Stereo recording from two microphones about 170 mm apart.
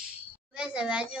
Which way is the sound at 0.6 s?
5° right (ahead or behind).